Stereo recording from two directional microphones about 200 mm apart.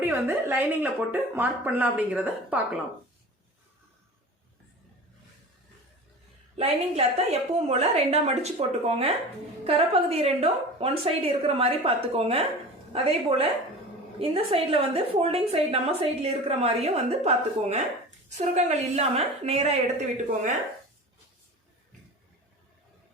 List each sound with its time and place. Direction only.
0.0 s speech: 10° right (ahead or behind)
6.6 s a woman's voice: 30° right (ahead or behind)